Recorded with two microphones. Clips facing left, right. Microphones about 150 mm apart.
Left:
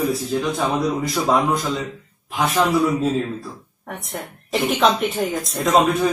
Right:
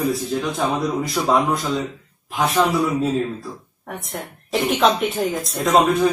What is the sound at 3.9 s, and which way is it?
A woman's voice, centre (ahead or behind).